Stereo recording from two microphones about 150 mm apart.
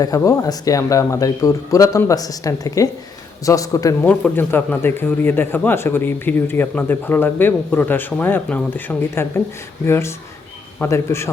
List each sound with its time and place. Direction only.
0.0 s speech: 25° left (ahead or behind)
4.0 s speech: 10° left (ahead or behind)